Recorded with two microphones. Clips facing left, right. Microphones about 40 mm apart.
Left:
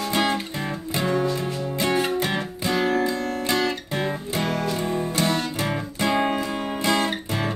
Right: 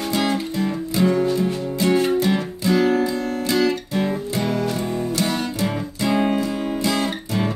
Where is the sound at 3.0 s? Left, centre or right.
Left.